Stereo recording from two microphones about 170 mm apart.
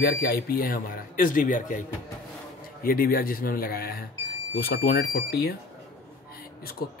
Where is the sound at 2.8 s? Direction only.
60° left (ahead or behind).